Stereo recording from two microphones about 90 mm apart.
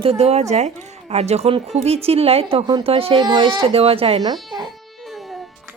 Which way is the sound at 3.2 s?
55° right (ahead or behind).